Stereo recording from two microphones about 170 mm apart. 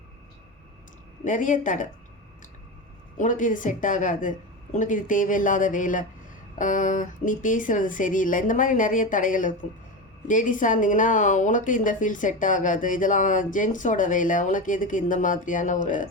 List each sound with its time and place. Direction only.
1.2 s a woman's voice: 50° left (ahead or behind)
3.2 s a woman's voice: 50° left (ahead or behind)